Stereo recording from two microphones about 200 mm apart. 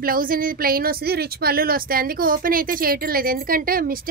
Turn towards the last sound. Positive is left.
turn(degrees=-45)  # may be behind; listen again after turning